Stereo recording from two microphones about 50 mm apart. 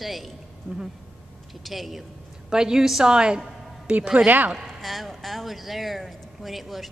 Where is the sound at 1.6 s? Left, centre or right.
Centre.